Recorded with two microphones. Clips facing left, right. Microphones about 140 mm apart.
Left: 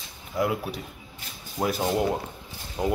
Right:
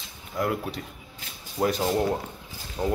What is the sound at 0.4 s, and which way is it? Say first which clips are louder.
A man's voice: left 1 dB; 5° left (ahead or behind).